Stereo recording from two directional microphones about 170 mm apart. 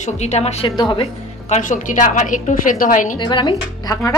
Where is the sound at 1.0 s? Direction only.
40° left (ahead or behind).